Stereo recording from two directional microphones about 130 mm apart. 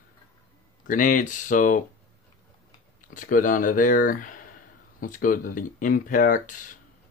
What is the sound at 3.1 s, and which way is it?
Speech, 90° left.